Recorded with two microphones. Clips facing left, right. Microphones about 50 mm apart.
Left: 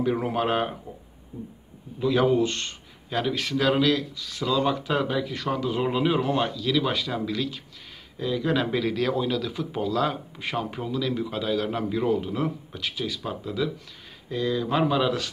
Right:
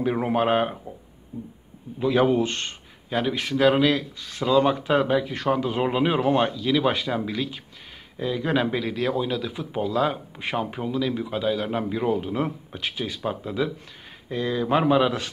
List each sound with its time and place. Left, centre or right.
0.0 s a man's voice: right
2.0 s a man's voice: right
3.1 s a man's voice: centre